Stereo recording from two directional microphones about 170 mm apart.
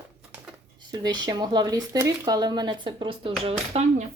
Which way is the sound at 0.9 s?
25° right (ahead or behind).